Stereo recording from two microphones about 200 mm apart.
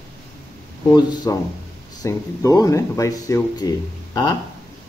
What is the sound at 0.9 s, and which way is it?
Speech, 20° left (ahead or behind).